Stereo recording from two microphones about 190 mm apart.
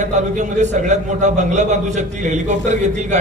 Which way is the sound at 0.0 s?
40° right (ahead or behind).